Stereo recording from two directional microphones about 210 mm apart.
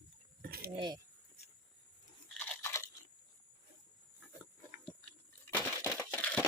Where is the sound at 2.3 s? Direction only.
5° left (ahead or behind).